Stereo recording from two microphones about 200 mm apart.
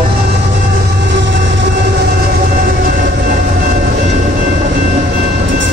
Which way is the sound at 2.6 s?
45° right (ahead or behind).